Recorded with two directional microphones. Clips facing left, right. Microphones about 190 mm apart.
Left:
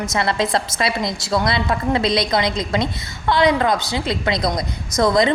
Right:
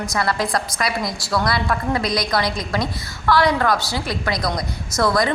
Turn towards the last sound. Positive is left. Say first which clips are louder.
# left 3 dB
turn(degrees=20)  # may be behind; listen again after turning